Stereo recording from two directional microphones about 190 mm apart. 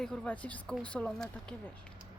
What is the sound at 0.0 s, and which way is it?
Speech, 5° left (ahead or behind).